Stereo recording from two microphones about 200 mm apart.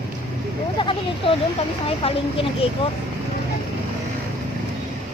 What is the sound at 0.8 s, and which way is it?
Speech, 25° left (ahead or behind).